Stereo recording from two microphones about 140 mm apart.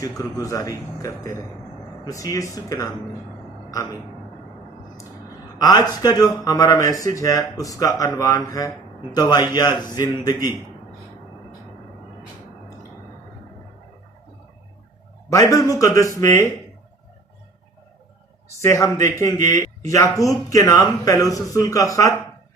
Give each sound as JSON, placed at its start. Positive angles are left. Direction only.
{"t": 0.2, "sound": "speech", "side_deg": 25}
{"t": 5.5, "sound": "a man's voice", "side_deg": 30}
{"t": 15.3, "sound": "speech", "side_deg": 25}
{"t": 18.6, "sound": "speech", "side_deg": 20}